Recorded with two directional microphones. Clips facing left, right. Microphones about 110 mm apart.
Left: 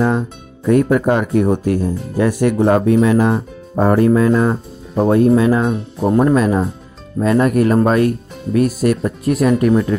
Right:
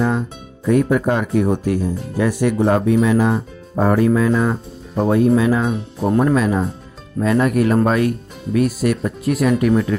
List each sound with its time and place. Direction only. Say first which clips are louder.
0.7 s speech: left 3 dB; 50° left (ahead or behind); by 9.9 s 30° left (ahead or behind)